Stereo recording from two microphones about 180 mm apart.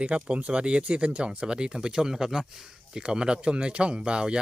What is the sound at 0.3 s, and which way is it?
Speech, 5° right (ahead or behind).